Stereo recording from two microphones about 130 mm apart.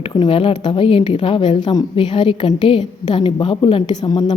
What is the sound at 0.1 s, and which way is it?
A woman's voice, 35° left (ahead or behind).